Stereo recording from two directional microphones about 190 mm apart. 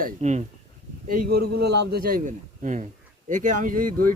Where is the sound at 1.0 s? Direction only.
50° right (ahead or behind).